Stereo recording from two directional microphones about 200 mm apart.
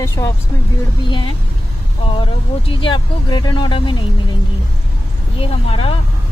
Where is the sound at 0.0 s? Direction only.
15° left (ahead or behind).